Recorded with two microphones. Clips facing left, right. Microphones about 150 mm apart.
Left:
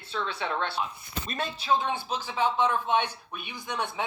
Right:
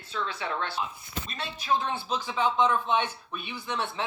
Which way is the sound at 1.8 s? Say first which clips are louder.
Even; 15° left (ahead or behind).